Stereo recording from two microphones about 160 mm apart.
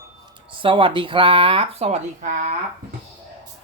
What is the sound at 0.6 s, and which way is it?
Speech, 30° right (ahead or behind).